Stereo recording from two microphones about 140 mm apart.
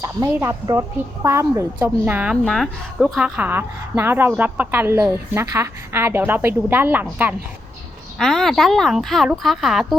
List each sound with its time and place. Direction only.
0.7 s a woman's voice: 20° right (ahead or behind)
2.3 s a woman's voice: 5° left (ahead or behind); by 7.3 s 15° right (ahead or behind)
8.2 s speech: centre (ahead or behind)